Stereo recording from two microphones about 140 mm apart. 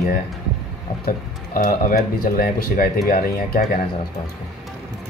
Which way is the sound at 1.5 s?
75° left (ahead or behind).